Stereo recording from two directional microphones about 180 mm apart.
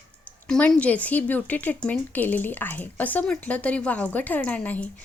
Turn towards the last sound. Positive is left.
turn(degrees=10)  # may be behind; listen again after turning